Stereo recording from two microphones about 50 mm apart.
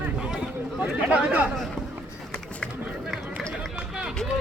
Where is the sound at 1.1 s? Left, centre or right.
Right.